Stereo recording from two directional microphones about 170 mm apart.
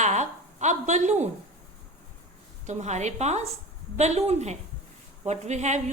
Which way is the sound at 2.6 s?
40° right (ahead or behind).